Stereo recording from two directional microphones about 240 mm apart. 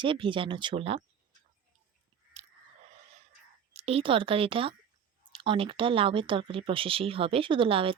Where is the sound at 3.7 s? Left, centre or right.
Right.